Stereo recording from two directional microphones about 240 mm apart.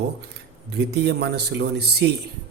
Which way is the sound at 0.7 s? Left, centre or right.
Right.